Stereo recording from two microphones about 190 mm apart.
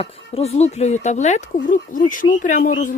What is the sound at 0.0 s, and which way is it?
Speech, 35° left (ahead or behind).